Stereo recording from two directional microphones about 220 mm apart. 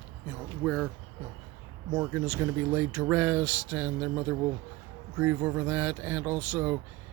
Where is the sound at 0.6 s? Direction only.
5° right (ahead or behind).